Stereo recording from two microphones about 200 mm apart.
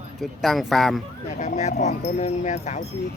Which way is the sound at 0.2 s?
Centre (ahead or behind).